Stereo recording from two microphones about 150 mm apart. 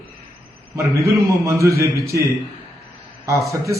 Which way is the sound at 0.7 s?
20° right (ahead or behind).